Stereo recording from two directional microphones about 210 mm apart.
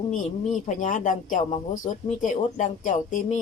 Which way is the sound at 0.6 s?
35° left (ahead or behind).